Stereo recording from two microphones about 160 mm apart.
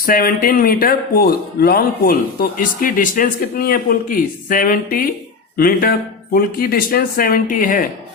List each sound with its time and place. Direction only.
0.0 s a man's voice: 65° left (ahead or behind)